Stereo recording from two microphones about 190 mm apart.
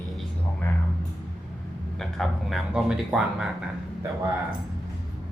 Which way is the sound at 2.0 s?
Centre (ahead or behind).